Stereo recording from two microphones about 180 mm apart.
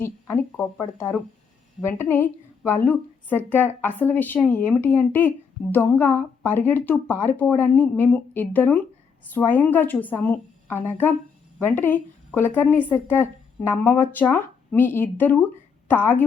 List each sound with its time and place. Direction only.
0.0 s speech: 10° left (ahead or behind)
1.9 s a woman's voice: 10° left (ahead or behind)